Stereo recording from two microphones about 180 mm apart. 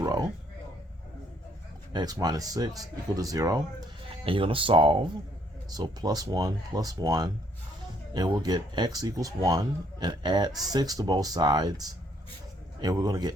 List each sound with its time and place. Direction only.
0.0 s speech: 20° right (ahead or behind)
1.9 s speech: 20° right (ahead or behind)
4.1 s speech: 30° right (ahead or behind)